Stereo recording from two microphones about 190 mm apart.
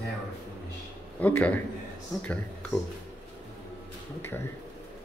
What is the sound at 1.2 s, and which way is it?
Speech, 10° left (ahead or behind).